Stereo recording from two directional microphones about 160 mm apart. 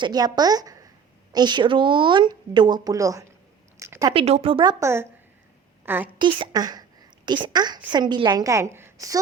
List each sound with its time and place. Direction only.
0.0 s speech: 25° right (ahead or behind)
3.8 s a sound: 15° right (ahead or behind)
4.1 s a woman's voice: 35° right (ahead or behind); by 6.1 s 15° right (ahead or behind)
6.1 s speech: 30° right (ahead or behind)